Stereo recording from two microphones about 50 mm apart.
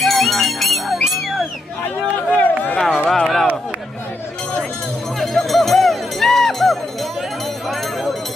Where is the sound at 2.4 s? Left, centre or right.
Left.